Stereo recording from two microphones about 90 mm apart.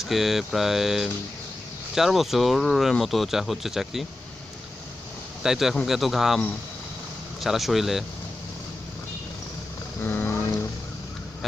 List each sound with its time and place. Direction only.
0.0 s speech: centre (ahead or behind)
5.4 s a man's voice: 5° right (ahead or behind)
7.4 s speech: centre (ahead or behind)
10.0 s vehicle: 20° left (ahead or behind)